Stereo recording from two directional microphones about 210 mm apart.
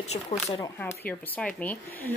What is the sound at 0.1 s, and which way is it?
Speech, 30° left (ahead or behind).